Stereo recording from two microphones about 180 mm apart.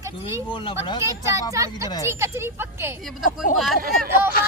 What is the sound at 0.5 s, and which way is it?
Speech, 25° left (ahead or behind).